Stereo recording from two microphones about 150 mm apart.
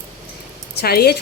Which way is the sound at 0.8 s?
90° left.